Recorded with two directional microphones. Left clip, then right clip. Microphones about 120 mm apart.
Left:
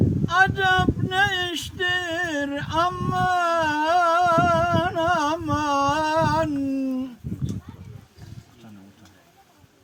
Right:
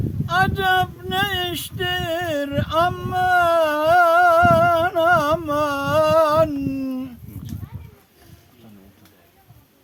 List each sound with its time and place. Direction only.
0.3 s male singing: 40° right (ahead or behind)